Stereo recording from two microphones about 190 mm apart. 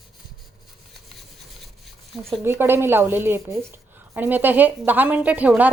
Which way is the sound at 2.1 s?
Centre (ahead or behind).